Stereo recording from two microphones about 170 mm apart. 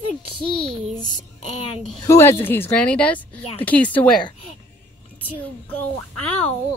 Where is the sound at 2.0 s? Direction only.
15° left (ahead or behind).